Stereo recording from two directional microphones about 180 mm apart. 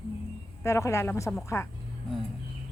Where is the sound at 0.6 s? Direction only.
15° left (ahead or behind).